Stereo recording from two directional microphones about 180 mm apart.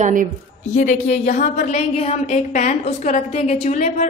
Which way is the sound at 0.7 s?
45° left (ahead or behind).